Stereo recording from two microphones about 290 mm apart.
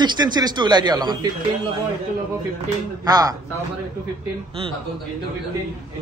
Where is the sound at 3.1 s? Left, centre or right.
Centre.